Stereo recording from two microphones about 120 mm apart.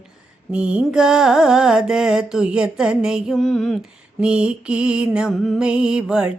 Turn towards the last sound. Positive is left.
turn(degrees=-5)  # may be behind; listen again after turning